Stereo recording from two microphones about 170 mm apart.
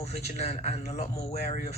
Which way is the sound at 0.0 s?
40° left (ahead or behind).